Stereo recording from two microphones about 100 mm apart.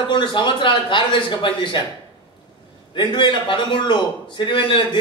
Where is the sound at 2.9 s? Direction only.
55° left (ahead or behind).